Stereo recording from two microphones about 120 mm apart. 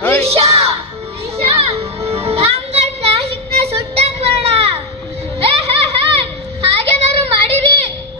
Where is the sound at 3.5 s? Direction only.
60° right (ahead or behind).